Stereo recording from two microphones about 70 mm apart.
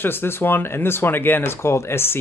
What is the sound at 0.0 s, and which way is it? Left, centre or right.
Speech, left.